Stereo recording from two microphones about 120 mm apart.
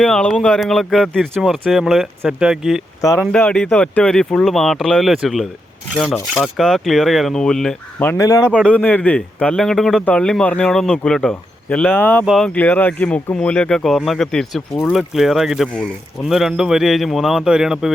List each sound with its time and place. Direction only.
0.0 s speech: 5° left (ahead or behind)
3.3 s speech: 10° left (ahead or behind)
7.9 s speech: 15° left (ahead or behind)
8.2 s a man's voice: 25° left (ahead or behind)
8.6 s speech: 10° left (ahead or behind)
12.2 s speech: 5° right (ahead or behind)
12.5 s speech: 15° left (ahead or behind); by 17.9 s 5° right (ahead or behind)